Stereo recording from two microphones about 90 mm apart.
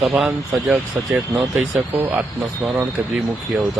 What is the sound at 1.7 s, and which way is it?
Speech, 20° right (ahead or behind).